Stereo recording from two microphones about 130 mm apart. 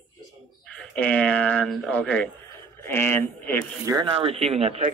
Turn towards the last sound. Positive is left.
turn(degrees=-50)  # may be behind; listen again after turning